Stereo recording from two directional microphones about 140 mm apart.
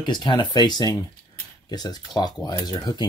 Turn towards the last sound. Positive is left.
turn(degrees=30)  # may be behind; listen again after turning